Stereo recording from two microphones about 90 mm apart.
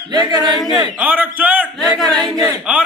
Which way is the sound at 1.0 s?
20° right (ahead or behind).